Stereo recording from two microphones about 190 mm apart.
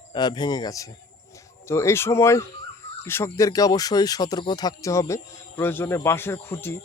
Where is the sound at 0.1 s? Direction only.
25° left (ahead or behind).